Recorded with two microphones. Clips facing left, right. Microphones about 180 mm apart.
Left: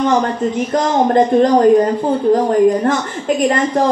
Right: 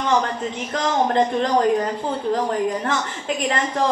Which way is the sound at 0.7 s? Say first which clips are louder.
Left 6 dB; 40° left (ahead or behind).